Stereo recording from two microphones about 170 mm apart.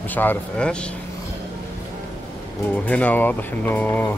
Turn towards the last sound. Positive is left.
turn(degrees=10)  # may be behind; listen again after turning